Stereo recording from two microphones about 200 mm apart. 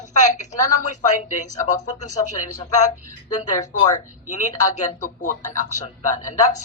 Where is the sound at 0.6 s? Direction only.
40° left (ahead or behind).